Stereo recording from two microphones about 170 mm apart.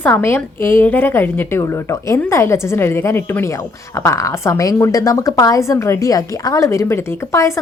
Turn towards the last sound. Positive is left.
turn(degrees=15)  # may be behind; listen again after turning